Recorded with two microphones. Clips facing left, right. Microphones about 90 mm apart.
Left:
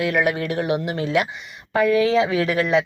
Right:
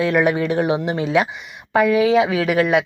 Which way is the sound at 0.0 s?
35° right (ahead or behind).